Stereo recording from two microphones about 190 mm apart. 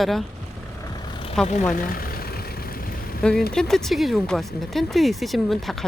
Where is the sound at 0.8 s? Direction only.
25° left (ahead or behind).